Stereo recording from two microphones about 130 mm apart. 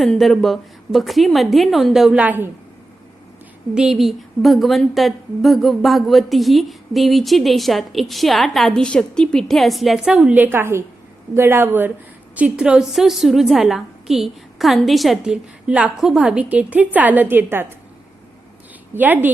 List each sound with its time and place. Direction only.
0.0 s a woman's voice: centre (ahead or behind)
3.8 s a woman's voice: centre (ahead or behind)
18.9 s a woman's voice: 15° right (ahead or behind)